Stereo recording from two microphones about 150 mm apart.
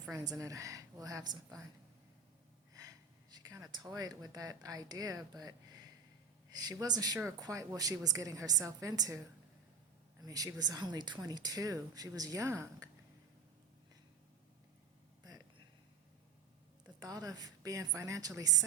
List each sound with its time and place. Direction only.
0.1 s speech: 20° right (ahead or behind)
3.3 s speech: 25° right (ahead or behind)
17.0 s speech: 25° right (ahead or behind)